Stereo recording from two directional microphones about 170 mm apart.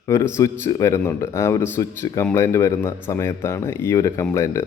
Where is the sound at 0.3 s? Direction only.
15° left (ahead or behind).